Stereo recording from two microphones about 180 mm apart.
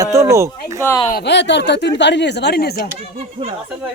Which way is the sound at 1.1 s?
65° left (ahead or behind).